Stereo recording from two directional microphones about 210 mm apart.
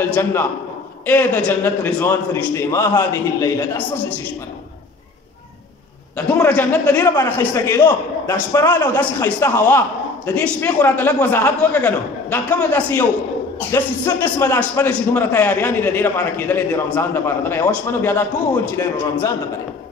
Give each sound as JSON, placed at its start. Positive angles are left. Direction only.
{"t": 0.1, "sound": "a man's voice", "side_deg": 10}
{"t": 6.1, "sound": "a man's voice", "side_deg": 10}